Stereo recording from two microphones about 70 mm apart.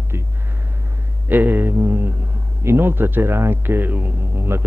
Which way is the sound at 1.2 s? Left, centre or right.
Right.